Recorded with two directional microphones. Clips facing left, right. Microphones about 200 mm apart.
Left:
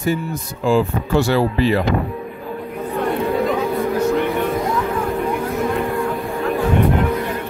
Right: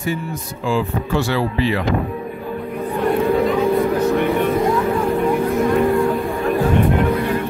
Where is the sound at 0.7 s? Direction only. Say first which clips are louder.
Left 3 dB; 45° left (ahead or behind).